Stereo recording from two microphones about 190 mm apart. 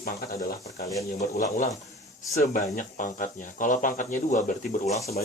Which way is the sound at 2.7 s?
45° left (ahead or behind).